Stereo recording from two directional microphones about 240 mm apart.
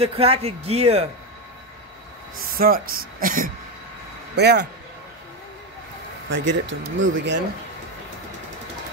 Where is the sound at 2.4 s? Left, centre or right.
Right.